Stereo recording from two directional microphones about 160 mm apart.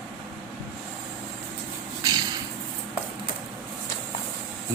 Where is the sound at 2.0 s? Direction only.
25° right (ahead or behind).